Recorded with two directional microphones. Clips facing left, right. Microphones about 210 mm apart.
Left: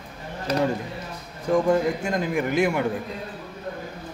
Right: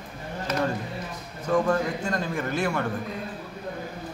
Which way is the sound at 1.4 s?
15° left (ahead or behind).